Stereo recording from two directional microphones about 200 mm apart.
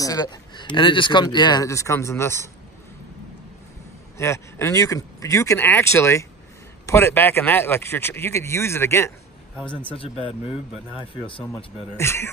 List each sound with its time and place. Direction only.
0.0 s speech: 20° left (ahead or behind)
4.2 s speech: 15° left (ahead or behind)
9.9 s speech: 30° left (ahead or behind)
12.0 s speech: 15° left (ahead or behind)